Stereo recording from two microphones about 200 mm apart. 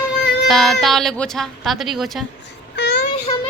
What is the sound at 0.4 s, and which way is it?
A woman's voice, centre (ahead or behind).